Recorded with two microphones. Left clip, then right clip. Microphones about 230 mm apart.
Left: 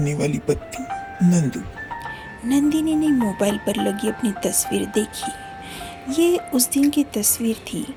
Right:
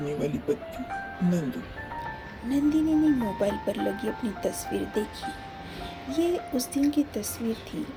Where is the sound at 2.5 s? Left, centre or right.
Left.